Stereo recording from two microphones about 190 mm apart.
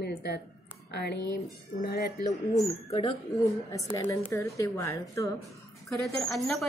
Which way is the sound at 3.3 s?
15° left (ahead or behind).